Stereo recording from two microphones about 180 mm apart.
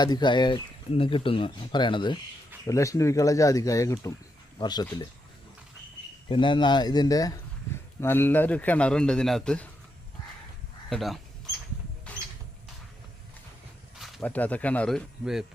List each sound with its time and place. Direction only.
0.0 s a man's voice: 25° left (ahead or behind)
6.2 s a man's voice: 25° left (ahead or behind); by 9.6 s 5° left (ahead or behind)
10.8 s speech: centre (ahead or behind)
14.0 s a man's voice: 5° left (ahead or behind)